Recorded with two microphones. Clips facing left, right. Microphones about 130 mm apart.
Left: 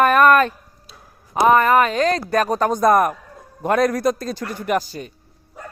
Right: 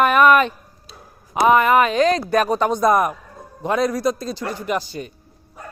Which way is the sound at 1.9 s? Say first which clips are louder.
Right 2 dB; 35° left (ahead or behind).